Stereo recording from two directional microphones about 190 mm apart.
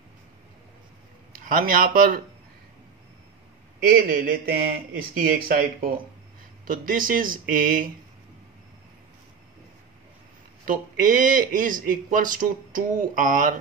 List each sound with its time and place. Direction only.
1.3 s a man's voice: 50° right (ahead or behind)
4.1 s speech: 50° right (ahead or behind)
10.6 s speech: 45° right (ahead or behind)